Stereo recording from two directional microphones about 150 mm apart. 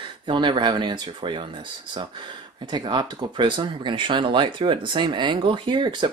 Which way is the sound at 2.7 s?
30° right (ahead or behind).